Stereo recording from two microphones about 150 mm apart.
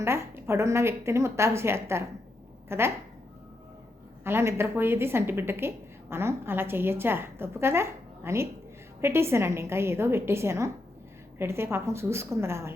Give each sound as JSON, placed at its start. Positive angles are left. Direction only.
{"t": 0.0, "sound": "speech", "side_deg": -15}
{"t": 4.2, "sound": "speech", "side_deg": -15}